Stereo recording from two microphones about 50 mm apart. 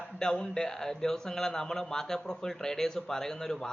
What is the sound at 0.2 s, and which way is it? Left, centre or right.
A man's voice, centre.